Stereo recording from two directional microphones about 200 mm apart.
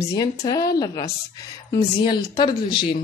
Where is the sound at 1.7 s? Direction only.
20° left (ahead or behind).